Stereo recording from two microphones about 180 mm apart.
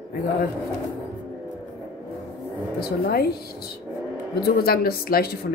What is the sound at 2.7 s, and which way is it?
Speech, 60° left (ahead or behind).